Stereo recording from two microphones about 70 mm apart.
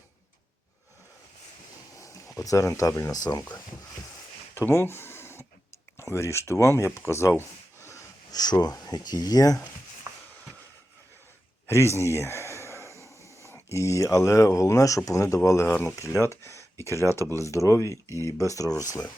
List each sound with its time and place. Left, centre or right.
2.0 s speech: left
3.1 s speech: left
4.5 s a sound: left
6.0 s speech: left
7.8 s snort: left
8.3 s speech: left
11.6 s speech: left